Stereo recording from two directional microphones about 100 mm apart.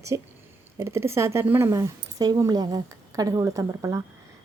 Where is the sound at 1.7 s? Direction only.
35° right (ahead or behind).